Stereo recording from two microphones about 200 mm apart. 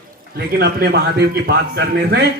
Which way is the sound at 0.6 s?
55° right (ahead or behind).